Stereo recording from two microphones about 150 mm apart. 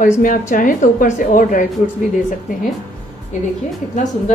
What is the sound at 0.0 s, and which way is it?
Speech, 60° left (ahead or behind).